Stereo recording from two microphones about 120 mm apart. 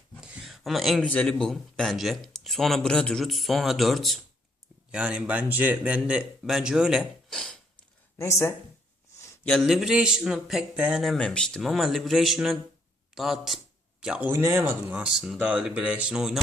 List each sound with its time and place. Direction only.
0.2 s a sound: centre (ahead or behind)
1.1 s speech: 10° left (ahead or behind)
7.3 s burping: 5° left (ahead or behind)
8.2 s speech: 25° left (ahead or behind)
9.6 s speech: 5° right (ahead or behind)
11.0 s a man's voice: centre (ahead or behind)
14.3 s speech: 20° right (ahead or behind)
15.0 s speech: 5° right (ahead or behind)